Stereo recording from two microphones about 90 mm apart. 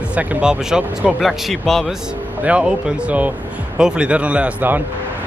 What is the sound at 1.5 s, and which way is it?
Speech, 5° left (ahead or behind).